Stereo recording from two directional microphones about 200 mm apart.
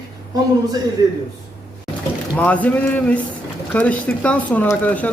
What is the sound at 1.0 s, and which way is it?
Speech, 20° right (ahead or behind).